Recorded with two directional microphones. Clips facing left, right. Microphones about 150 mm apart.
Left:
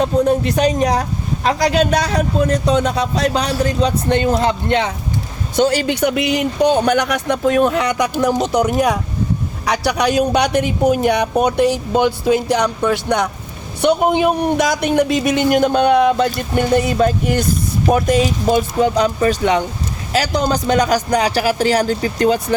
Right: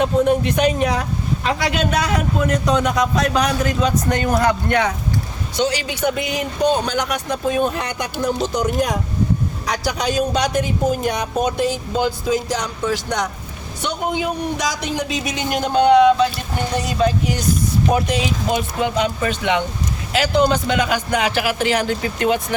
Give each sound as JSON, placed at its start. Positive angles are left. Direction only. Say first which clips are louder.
{"t": 0.0, "sound": "speech", "louder": "left 1 dB", "side_deg": 35}
{"t": 5.5, "sound": "speech", "louder": "left 6 dB", "side_deg": 50}